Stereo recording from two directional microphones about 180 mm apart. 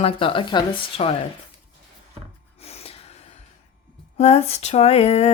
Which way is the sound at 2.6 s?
35° left (ahead or behind).